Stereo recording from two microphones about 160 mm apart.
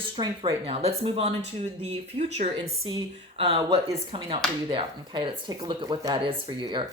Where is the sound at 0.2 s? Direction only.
30° right (ahead or behind).